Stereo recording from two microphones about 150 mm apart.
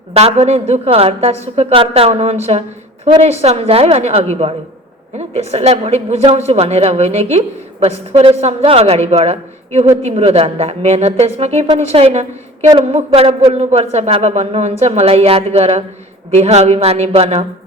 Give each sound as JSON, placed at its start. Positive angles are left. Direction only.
{"t": 0.1, "sound": "a woman's voice", "side_deg": -40}